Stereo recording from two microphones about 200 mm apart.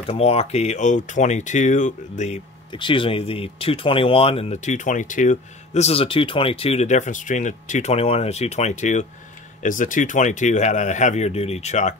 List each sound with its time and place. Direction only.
0.0 s speech: 30° left (ahead or behind)